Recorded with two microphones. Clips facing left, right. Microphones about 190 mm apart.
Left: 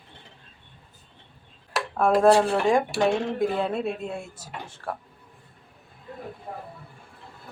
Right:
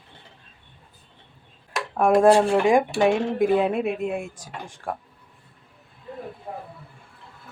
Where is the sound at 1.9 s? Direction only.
15° right (ahead or behind).